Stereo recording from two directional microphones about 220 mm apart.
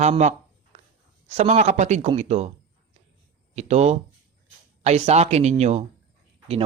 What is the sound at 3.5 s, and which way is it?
Speech, 30° right (ahead or behind).